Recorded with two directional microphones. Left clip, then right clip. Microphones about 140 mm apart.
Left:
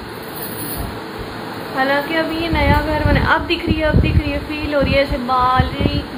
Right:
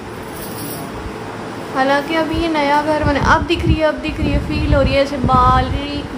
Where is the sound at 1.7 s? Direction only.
25° right (ahead or behind).